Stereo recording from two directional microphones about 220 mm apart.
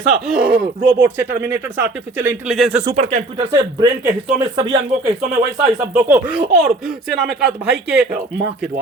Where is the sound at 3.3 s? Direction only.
20° right (ahead or behind).